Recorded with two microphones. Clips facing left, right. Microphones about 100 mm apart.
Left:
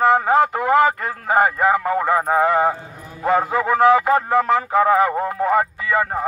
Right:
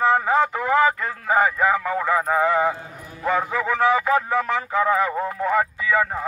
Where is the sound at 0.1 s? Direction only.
50° left (ahead or behind).